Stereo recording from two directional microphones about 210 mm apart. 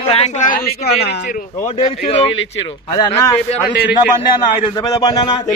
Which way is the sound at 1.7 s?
30° left (ahead or behind).